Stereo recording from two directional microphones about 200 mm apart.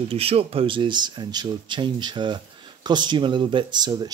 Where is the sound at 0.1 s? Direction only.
30° right (ahead or behind).